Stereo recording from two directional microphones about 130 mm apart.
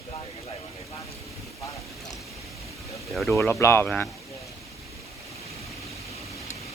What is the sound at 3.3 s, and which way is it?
Speech, 20° left (ahead or behind).